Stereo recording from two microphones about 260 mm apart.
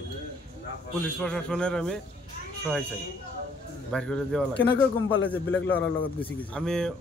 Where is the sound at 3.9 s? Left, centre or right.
Centre.